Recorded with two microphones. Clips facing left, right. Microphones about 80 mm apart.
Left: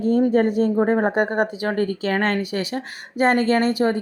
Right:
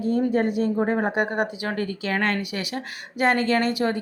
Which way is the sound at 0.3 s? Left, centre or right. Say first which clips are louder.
Left 4 dB; left.